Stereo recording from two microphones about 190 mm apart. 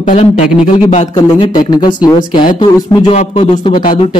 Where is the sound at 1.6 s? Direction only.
20° left (ahead or behind).